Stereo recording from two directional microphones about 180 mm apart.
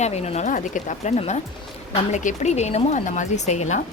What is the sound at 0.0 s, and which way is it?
Speech, 35° left (ahead or behind).